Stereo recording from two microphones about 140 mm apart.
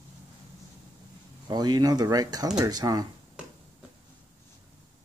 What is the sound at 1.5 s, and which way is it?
Speech, 30° right (ahead or behind).